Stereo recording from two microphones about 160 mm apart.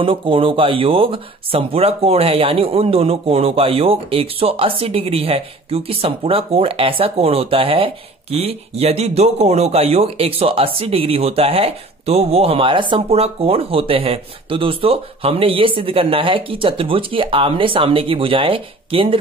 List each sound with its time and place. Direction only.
0.0 s speech: 35° right (ahead or behind)